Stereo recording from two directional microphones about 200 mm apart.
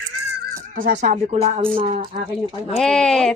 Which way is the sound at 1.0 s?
35° right (ahead or behind).